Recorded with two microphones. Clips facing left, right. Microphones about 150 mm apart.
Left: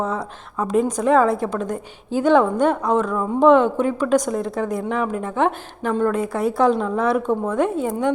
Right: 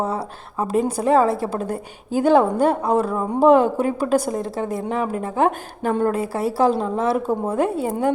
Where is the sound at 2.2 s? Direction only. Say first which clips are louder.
Even; 35° right (ahead or behind).